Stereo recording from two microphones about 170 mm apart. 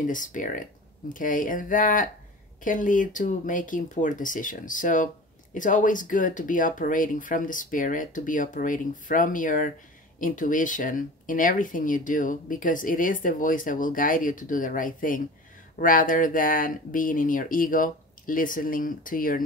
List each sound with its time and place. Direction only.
0.0 s speech: 50° left (ahead or behind)